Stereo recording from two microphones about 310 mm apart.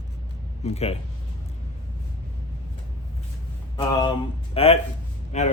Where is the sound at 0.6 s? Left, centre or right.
Centre.